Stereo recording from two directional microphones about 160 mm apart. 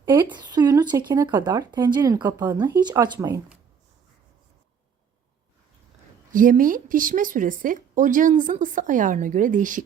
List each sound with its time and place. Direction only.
0.0 s speech: 30° right (ahead or behind)
2.2 s speech: 10° right (ahead or behind)
2.8 s speech: 25° right (ahead or behind)
6.3 s speech: 55° right (ahead or behind)